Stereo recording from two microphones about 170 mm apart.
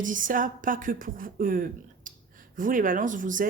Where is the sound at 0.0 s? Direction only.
50° right (ahead or behind).